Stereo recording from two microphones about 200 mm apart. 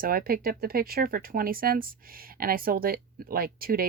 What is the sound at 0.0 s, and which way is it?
Speech, 45° right (ahead or behind).